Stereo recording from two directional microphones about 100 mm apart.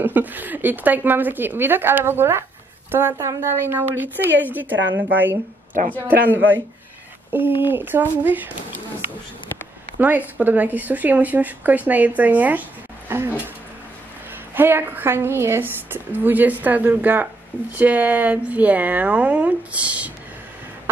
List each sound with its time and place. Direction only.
0.0 s speech: 20° right (ahead or behind)
9.9 s speech: 20° right (ahead or behind)
13.1 s a sound: 25° right (ahead or behind)
14.5 s speech: 20° right (ahead or behind)